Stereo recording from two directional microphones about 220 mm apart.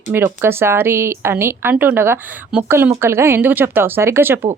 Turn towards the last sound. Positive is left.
turn(degrees=-10)  # may be behind; listen again after turning